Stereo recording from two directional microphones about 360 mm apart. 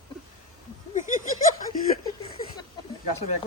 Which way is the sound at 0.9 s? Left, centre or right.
Left.